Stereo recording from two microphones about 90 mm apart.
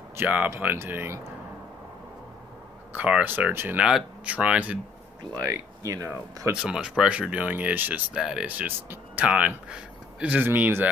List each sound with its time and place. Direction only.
0.2 s speech: 20° right (ahead or behind)
2.9 s speech: 15° right (ahead or behind)
5.3 s speech: 40° right (ahead or behind)
6.5 s speech: 10° right (ahead or behind)
8.2 s speech: 10° right (ahead or behind)
8.5 s speech: 20° right (ahead or behind)